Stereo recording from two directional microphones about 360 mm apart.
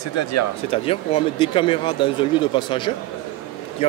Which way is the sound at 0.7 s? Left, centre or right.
Centre.